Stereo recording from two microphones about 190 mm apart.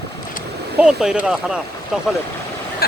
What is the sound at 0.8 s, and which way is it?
Speech, 5° right (ahead or behind).